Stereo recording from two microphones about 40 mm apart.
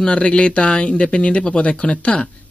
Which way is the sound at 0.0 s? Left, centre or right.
Left.